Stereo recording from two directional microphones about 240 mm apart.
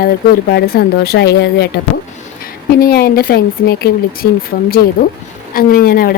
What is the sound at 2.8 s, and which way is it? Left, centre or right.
A woman's voice, left.